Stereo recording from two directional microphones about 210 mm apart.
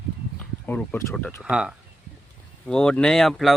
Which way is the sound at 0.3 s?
5° left (ahead or behind).